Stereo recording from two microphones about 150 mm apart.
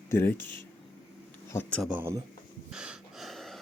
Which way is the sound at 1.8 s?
10° right (ahead or behind).